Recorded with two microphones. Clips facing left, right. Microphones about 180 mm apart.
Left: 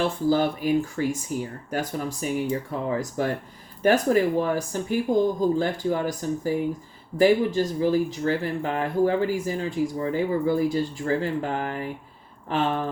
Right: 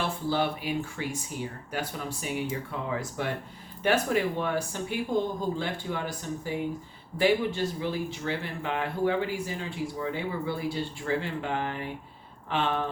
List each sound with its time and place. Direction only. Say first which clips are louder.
0.3 s speech: left 7 dB; 45° left (ahead or behind)